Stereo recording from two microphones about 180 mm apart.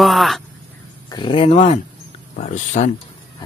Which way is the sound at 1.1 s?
25° left (ahead or behind).